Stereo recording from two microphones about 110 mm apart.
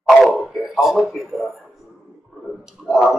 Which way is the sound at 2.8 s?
Centre (ahead or behind).